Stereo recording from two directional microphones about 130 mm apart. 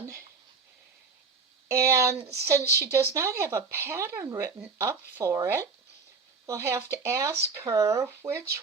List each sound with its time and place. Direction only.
1.6 s speech: 20° right (ahead or behind)
2.1 s speech: 55° right (ahead or behind)
2.7 s speech: 20° right (ahead or behind)